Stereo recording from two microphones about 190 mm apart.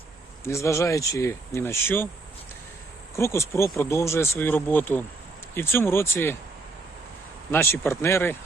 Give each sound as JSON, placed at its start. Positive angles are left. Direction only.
{"t": 0.4, "sound": "speech", "side_deg": 15}
{"t": 3.2, "sound": "speech", "side_deg": 15}
{"t": 7.5, "sound": "speech", "side_deg": 10}